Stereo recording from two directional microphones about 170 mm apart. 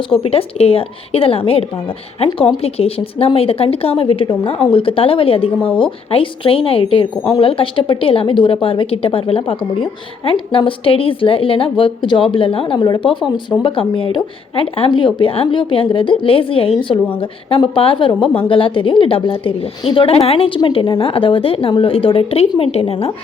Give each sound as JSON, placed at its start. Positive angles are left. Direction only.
{"t": 0.1, "sound": "a woman's voice", "side_deg": 35}